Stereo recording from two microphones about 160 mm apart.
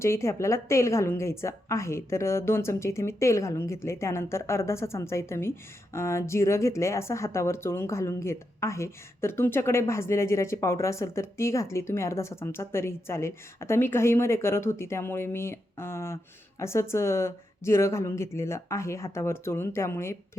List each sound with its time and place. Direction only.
0.0 s a woman's voice: 15° left (ahead or behind)